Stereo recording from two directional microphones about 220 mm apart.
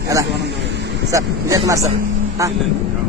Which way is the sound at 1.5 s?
15° right (ahead or behind).